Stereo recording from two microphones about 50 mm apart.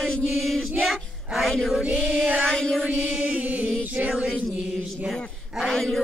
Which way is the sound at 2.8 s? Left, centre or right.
Centre.